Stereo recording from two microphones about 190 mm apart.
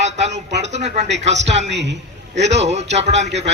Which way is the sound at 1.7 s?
65° right (ahead or behind).